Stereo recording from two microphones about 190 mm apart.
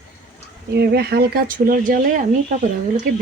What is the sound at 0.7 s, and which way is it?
Speech, 60° right (ahead or behind).